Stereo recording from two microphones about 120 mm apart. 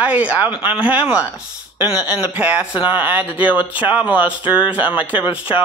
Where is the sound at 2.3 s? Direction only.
10° right (ahead or behind).